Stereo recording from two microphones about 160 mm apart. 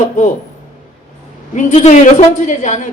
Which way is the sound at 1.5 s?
50° left (ahead or behind).